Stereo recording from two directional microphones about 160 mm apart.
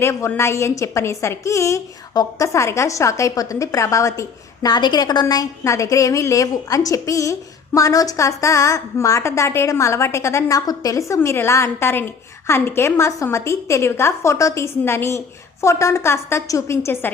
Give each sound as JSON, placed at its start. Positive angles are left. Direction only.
{"t": 0.0, "sound": "a woman's voice", "side_deg": 15}